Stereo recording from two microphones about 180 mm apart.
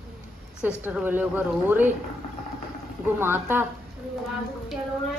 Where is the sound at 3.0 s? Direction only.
10° right (ahead or behind).